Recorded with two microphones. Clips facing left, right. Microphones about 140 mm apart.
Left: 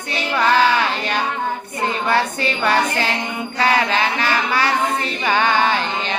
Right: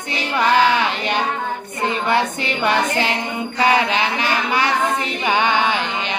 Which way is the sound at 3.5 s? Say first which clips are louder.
Right 1 dB; 20° right (ahead or behind).